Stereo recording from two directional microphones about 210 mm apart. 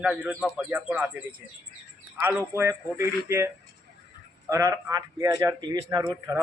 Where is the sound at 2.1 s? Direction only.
10° right (ahead or behind).